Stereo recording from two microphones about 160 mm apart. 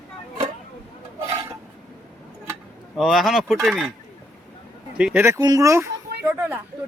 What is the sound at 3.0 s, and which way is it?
Speech, centre (ahead or behind).